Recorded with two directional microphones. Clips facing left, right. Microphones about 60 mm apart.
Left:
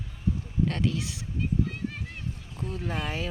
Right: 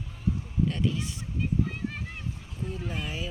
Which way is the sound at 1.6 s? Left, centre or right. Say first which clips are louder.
Even; centre.